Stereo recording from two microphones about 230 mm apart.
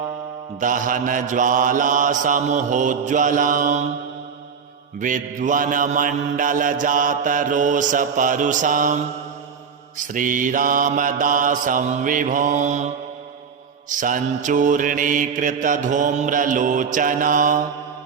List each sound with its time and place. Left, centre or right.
0.6 s mantra: right
4.9 s mantra: right
10.1 s mantra: right
13.9 s mantra: right